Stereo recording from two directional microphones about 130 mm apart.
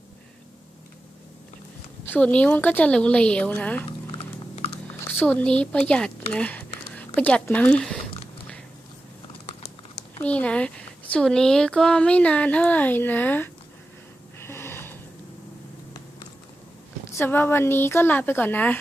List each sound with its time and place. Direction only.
2.0 s speech: 10° left (ahead or behind)
3.8 s a sound: 50° left (ahead or behind)
5.1 s speech: 15° left (ahead or behind)
10.2 s speech: 10° left (ahead or behind)
14.4 s snort: 20° left (ahead or behind)
17.1 s speech: 15° left (ahead or behind)